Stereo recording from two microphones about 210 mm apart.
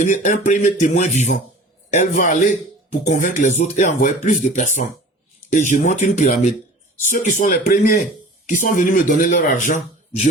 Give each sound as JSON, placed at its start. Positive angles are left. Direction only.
{"t": 0.0, "sound": "speech", "side_deg": 35}